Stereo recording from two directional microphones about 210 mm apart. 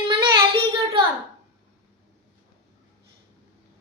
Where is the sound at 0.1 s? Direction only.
25° right (ahead or behind).